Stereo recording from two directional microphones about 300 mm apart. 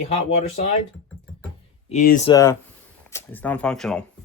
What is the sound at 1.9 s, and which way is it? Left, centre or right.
Speech, left.